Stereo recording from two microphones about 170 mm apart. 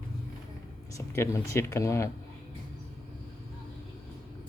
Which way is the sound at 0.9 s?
15° left (ahead or behind).